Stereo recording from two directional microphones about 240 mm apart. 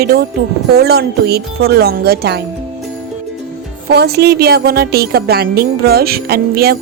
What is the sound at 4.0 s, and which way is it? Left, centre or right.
A woman's voice, right.